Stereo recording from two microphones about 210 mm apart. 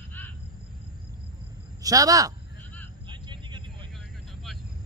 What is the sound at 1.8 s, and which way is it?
Speech, 15° right (ahead or behind).